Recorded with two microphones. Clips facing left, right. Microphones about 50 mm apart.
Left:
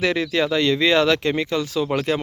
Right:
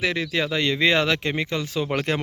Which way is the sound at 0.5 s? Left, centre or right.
Right.